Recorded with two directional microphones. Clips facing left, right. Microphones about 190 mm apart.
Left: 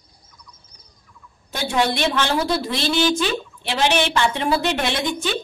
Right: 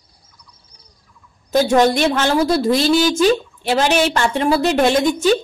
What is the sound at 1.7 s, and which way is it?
A woman's voice, 45° right (ahead or behind).